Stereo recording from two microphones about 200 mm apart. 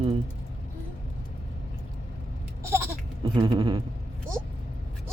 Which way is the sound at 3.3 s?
20° right (ahead or behind).